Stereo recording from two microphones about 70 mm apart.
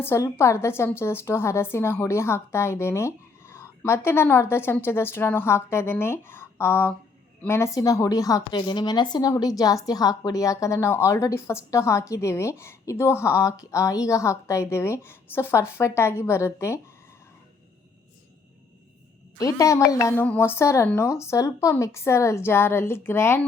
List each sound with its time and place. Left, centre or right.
0.3 s a woman's voice: left
7.8 s a woman's voice: left
9.6 s a woman's voice: left
19.4 s a woman's voice: left
20.1 s a sound: left
20.4 s a woman's voice: left